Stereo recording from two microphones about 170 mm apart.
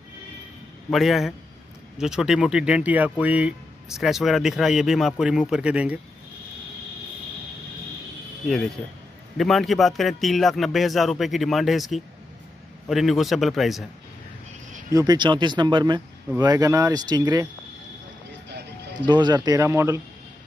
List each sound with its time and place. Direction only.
0.8 s speech: centre (ahead or behind)
9.4 s speech: centre (ahead or behind)
14.9 s speech: 20° right (ahead or behind)
19.0 s speech: 25° right (ahead or behind)